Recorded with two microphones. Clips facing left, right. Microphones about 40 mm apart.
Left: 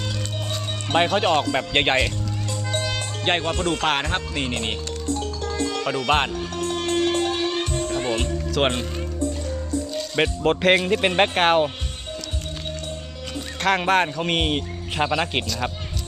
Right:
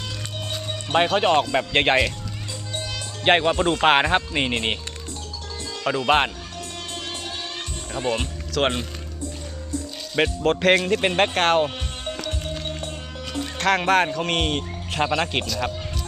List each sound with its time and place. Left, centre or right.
0.9 s speech: centre
2.7 s music: left
3.2 s speech: right
5.0 s music: left
6.1 s speech: centre
6.6 s music: left
8.2 s speech: centre
9.9 s speech: centre
13.6 s speech: centre